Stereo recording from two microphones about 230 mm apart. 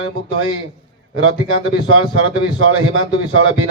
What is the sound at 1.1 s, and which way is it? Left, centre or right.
A man's voice, right.